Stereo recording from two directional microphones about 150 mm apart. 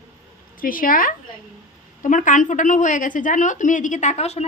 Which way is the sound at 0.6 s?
65° left (ahead or behind).